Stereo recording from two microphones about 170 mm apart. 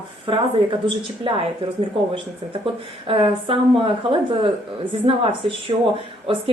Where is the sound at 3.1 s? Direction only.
30° right (ahead or behind).